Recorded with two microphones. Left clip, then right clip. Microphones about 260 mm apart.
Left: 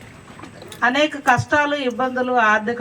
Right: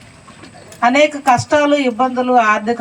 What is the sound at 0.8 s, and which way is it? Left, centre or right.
A man's voice, right.